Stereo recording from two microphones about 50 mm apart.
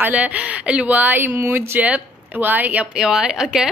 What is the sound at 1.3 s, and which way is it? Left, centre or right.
Speech, right.